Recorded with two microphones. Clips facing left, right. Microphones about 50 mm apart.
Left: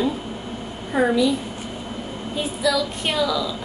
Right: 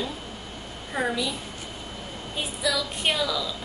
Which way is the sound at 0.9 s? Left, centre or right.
Centre.